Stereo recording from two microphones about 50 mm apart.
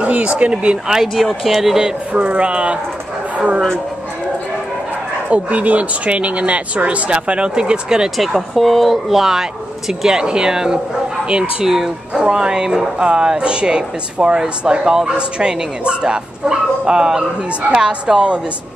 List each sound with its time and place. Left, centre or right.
0.0 s speech: right
0.8 s speech: centre
2.1 s speech: right
5.3 s speech: right
8.2 s speech: centre